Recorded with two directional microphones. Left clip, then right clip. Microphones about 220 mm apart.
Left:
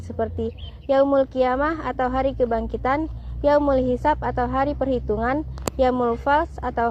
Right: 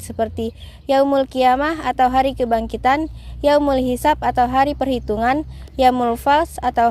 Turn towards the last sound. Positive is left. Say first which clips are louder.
# right 6 dB
turn(degrees=-60)  # may be behind; listen again after turning